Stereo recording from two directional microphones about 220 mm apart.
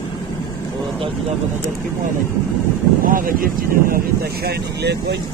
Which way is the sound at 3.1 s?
40° right (ahead or behind).